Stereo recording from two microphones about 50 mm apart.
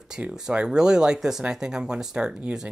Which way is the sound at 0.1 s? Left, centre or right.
Centre.